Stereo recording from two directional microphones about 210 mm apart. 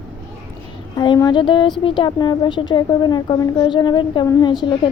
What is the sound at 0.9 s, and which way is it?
A woman's voice, 20° left (ahead or behind).